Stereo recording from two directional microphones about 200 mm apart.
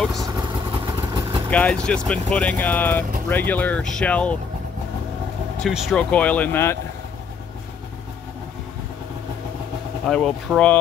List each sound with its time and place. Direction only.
0.0 s vehicle: centre (ahead or behind)
0.7 s vehicle: 25° right (ahead or behind)
1.5 s speech: 5° left (ahead or behind)
5.6 s speech: centre (ahead or behind)
10.0 s speech: centre (ahead or behind)